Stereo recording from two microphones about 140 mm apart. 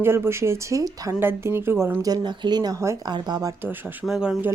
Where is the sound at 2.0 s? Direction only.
30° right (ahead or behind).